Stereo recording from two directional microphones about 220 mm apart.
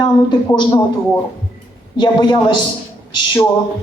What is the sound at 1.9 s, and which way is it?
Speech, 20° left (ahead or behind).